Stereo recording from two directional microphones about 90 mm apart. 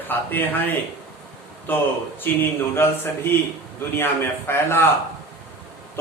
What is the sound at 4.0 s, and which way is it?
Speech, 25° left (ahead or behind).